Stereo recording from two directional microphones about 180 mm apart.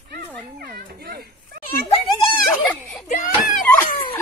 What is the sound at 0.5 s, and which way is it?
Children playing, 60° right (ahead or behind).